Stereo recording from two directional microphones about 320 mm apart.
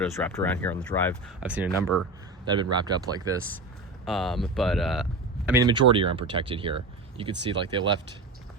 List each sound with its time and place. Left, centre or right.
0.0 s speech: centre
2.4 s speech: centre
4.0 s speech: centre
5.5 s speech: centre